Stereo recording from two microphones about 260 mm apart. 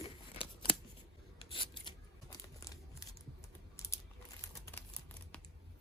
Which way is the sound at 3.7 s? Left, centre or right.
Centre.